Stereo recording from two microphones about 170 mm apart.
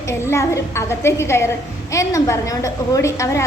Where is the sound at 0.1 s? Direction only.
15° left (ahead or behind).